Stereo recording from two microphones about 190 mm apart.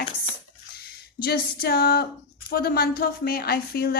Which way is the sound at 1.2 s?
55° left (ahead or behind).